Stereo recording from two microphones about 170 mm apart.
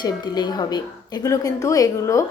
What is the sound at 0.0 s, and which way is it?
A woman's voice, 25° left (ahead or behind).